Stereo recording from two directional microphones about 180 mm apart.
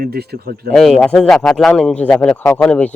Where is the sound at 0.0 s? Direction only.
60° right (ahead or behind).